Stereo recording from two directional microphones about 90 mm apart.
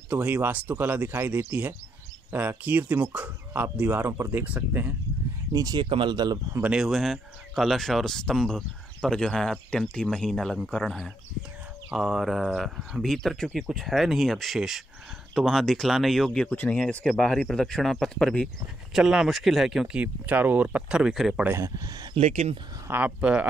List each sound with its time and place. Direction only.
0.1 s speech: 20° right (ahead or behind)
5.5 s speech: 45° right (ahead or behind)
5.9 s speech: 65° right (ahead or behind)
6.6 s speech: 5° right (ahead or behind)
18.9 s speech: 5° right (ahead or behind)
21.5 s speech: 35° right (ahead or behind)
22.8 s speech: 20° right (ahead or behind)